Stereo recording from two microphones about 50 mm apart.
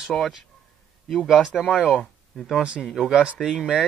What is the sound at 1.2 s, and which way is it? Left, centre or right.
Speech, centre.